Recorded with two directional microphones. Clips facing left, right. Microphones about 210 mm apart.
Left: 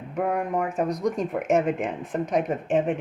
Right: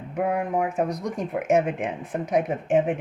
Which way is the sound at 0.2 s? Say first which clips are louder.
Right 1 dB; 5° right (ahead or behind).